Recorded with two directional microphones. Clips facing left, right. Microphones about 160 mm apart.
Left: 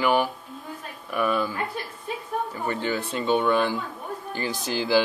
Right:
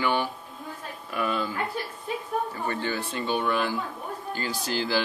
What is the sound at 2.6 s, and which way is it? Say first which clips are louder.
Speech: left 2 dB; 20° left (ahead or behind).